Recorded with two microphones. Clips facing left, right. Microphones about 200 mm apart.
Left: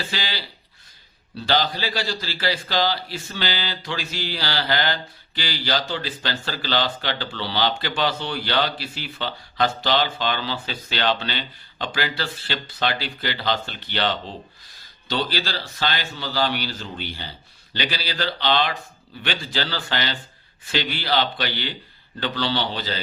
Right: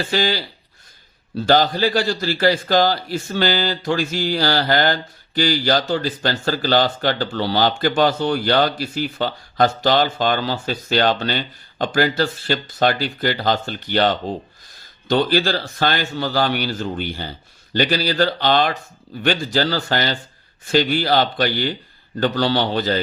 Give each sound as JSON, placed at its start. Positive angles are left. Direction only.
{"t": 0.0, "sound": "a man's voice", "side_deg": -45}